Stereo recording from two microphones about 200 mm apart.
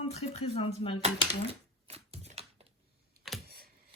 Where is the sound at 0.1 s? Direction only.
30° left (ahead or behind).